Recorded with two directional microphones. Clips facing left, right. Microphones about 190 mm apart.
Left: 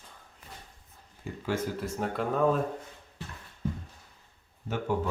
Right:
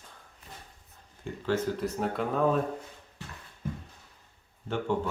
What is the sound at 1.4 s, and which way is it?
Speech, 5° left (ahead or behind).